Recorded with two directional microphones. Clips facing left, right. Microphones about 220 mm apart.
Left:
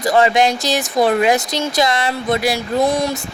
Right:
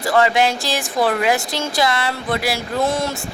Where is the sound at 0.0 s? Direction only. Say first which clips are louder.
Left 2 dB; 20° left (ahead or behind).